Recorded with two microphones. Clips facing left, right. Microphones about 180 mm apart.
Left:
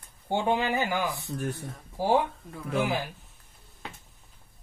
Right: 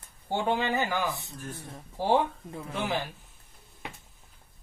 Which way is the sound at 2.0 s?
10° left (ahead or behind).